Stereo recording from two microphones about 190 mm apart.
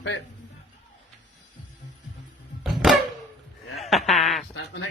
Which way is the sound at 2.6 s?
Centre (ahead or behind).